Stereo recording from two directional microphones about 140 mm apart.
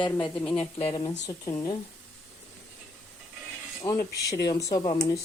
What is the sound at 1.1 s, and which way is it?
Speech, 25° left (ahead or behind).